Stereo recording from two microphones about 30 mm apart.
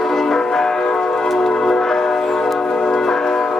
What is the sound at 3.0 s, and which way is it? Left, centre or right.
Music, left.